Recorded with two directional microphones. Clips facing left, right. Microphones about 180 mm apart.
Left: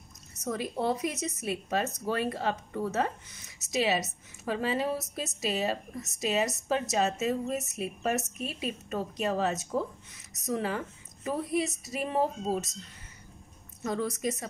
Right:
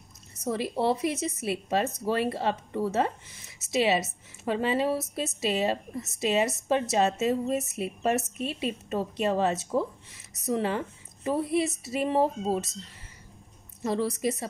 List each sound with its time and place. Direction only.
0.4 s speech: 30° right (ahead or behind)
13.8 s speech: 30° right (ahead or behind)